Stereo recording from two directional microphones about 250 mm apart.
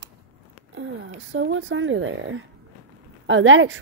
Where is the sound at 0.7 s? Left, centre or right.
Right.